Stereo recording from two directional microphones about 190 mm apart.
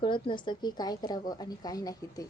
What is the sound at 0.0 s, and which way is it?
A woman's voice, 25° left (ahead or behind).